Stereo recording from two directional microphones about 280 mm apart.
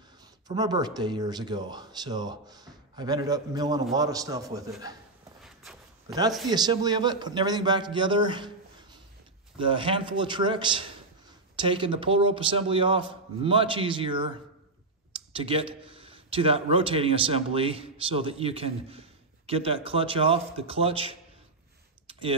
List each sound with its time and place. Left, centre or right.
0.5 s speech: centre
5.4 s walk: centre
6.5 s speech: centre
9.6 s speech: centre